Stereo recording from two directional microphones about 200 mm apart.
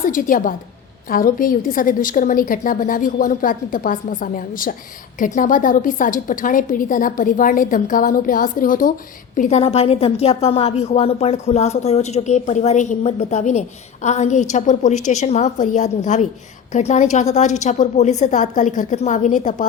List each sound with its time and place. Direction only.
0.0 s a woman's voice: 40° left (ahead or behind)
9.4 s a woman's voice: 30° left (ahead or behind)